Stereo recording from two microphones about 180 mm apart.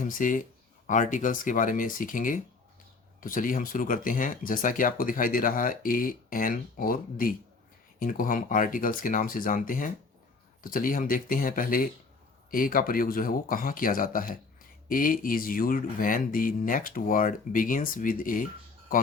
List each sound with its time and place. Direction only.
0.0 s speech: 45° left (ahead or behind)